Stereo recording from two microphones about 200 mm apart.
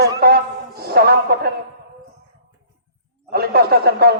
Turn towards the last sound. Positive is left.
turn(degrees=-50)  # may be behind; listen again after turning